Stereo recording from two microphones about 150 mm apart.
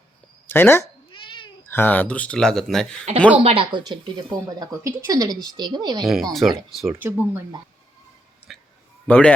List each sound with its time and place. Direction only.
0.4 s speech: 15° left (ahead or behind)
3.1 s speech: 50° right (ahead or behind)
3.4 s speech: 35° right (ahead or behind)
6.0 s speech: centre (ahead or behind)
6.8 s speech: 15° right (ahead or behind)
8.5 s a sound: centre (ahead or behind)
9.0 s speech: 10° left (ahead or behind)